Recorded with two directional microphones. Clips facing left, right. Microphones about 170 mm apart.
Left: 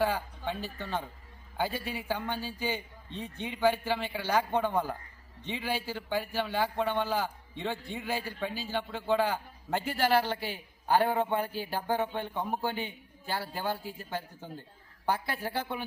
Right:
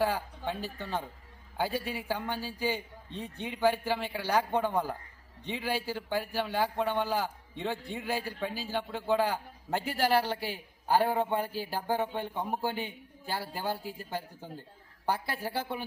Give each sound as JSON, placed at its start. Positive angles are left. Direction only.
{"t": 0.0, "sound": "a sound", "side_deg": -5}
{"t": 0.8, "sound": "a man's voice", "side_deg": -10}
{"t": 1.7, "sound": "a man's voice", "side_deg": -40}
{"t": 2.0, "sound": "a man's voice", "side_deg": -10}
{"t": 2.4, "sound": "a man's voice", "side_deg": -40}
{"t": 3.4, "sound": "a man's voice", "side_deg": -5}